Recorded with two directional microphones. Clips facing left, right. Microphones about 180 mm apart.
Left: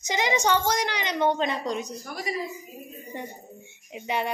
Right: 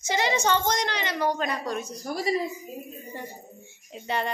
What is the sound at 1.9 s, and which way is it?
Speech, 35° right (ahead or behind).